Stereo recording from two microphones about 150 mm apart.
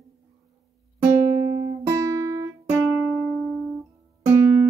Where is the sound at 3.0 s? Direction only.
Centre (ahead or behind).